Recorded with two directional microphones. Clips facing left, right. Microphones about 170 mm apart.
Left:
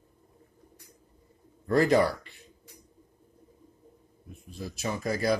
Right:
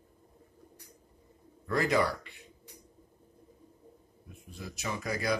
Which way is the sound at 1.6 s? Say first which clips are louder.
Left 6 dB; 35° left (ahead or behind).